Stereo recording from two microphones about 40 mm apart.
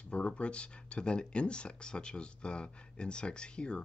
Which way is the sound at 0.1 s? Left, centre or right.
Left.